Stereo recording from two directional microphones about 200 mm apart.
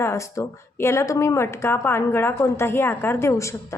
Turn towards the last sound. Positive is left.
turn(degrees=15)  # may be behind; listen again after turning